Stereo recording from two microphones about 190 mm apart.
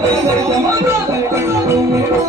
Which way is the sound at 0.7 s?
15° right (ahead or behind).